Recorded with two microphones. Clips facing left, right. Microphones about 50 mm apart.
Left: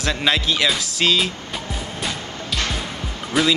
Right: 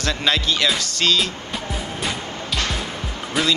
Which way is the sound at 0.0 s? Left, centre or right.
Centre.